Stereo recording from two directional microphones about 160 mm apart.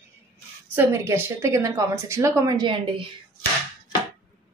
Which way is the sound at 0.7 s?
15° right (ahead or behind).